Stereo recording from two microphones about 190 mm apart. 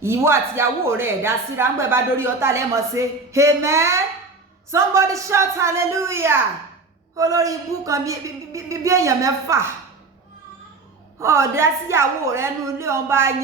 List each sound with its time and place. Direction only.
0.0 s speech: 15° right (ahead or behind)
11.2 s speech: 15° right (ahead or behind)